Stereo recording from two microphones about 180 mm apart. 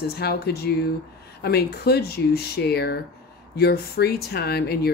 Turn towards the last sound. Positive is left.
turn(degrees=60)  # may be behind; listen again after turning